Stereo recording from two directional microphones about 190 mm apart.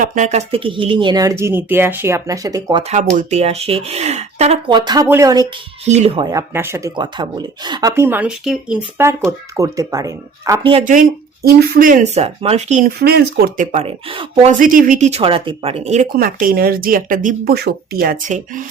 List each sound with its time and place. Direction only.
0.0 s speech: 40° right (ahead or behind); by 2.8 s 20° right (ahead or behind)
2.8 s speech: 40° right (ahead or behind); by 5.5 s 20° right (ahead or behind)
5.8 s speech: 35° right (ahead or behind)
6.2 s speech: 15° right (ahead or behind)
10.6 s speech: 30° right (ahead or behind)
11.4 s speech: 55° right (ahead or behind)
12.1 s speech: 35° right (ahead or behind)
13.0 s speech: 55° right (ahead or behind)
13.7 s speech: 35° right (ahead or behind)
14.6 s speech: 45° right (ahead or behind)
16.1 s speech: 50° right (ahead or behind)